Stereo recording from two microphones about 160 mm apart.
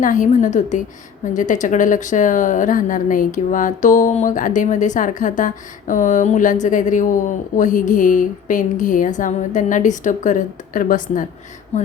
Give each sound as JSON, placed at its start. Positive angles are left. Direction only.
{"t": 0.0, "sound": "speech", "side_deg": 55}